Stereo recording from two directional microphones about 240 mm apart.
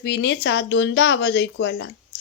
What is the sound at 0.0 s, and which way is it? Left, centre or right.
Speech, left.